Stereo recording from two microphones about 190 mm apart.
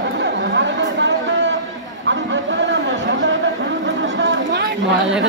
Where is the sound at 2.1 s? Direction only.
75° right (ahead or behind).